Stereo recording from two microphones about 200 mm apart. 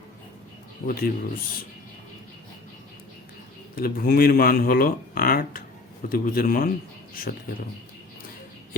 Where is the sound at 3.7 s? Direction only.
50° left (ahead or behind).